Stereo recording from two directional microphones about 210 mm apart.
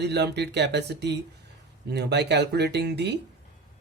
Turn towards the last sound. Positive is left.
turn(degrees=-50)  # may be behind; listen again after turning